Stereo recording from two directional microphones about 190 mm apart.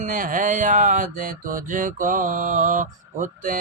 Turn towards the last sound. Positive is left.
turn(degrees=-45)  # may be behind; listen again after turning